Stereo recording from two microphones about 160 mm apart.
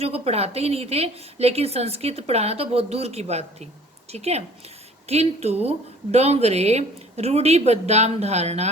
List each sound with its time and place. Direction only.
0.0 s a woman's voice: 40° right (ahead or behind)